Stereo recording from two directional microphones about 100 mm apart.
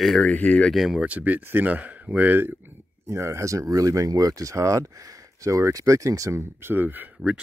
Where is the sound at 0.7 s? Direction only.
Centre (ahead or behind).